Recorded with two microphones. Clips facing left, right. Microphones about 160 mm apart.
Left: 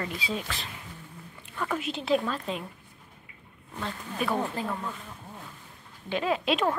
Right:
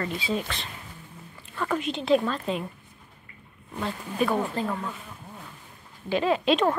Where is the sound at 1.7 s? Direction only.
5° left (ahead or behind).